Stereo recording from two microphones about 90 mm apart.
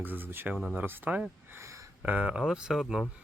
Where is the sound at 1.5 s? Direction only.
30° right (ahead or behind).